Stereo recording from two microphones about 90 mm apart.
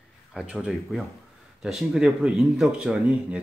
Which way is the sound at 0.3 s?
10° right (ahead or behind).